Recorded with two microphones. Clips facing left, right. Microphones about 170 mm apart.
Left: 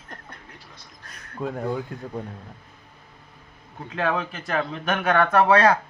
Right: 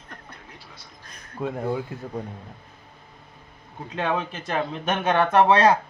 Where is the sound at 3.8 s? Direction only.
20° right (ahead or behind).